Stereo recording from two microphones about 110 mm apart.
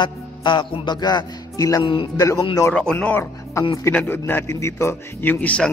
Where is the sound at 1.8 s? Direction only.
50° left (ahead or behind).